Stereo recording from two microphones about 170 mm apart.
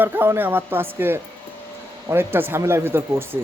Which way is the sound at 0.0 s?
10° right (ahead or behind).